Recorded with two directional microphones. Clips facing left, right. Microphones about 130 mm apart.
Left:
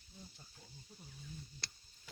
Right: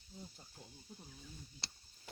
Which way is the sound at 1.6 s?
25° right (ahead or behind).